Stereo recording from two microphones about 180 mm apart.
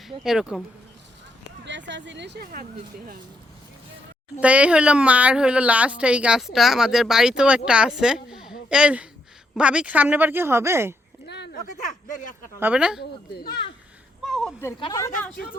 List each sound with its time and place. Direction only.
0.3 s speech: centre (ahead or behind)
1.6 s speech: 80° right
4.4 s speech: 5° right (ahead or behind)
12.0 s speech: 45° left (ahead or behind)
12.5 s speech: 10° right (ahead or behind)
13.0 s speech: 60° left (ahead or behind)
14.3 s a sound: centre (ahead or behind)
14.9 s speech: 15° left (ahead or behind)